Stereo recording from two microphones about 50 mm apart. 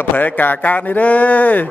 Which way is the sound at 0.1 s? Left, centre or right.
Left.